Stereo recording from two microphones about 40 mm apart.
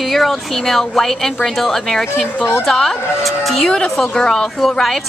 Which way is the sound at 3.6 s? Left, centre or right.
Centre.